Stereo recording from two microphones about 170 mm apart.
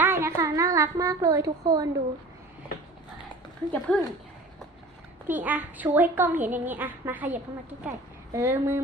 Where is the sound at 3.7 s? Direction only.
5° left (ahead or behind).